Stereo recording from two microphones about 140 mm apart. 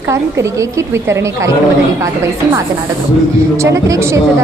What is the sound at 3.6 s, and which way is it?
Speech, 20° right (ahead or behind).